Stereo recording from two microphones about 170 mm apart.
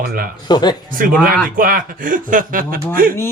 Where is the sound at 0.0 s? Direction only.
60° right (ahead or behind).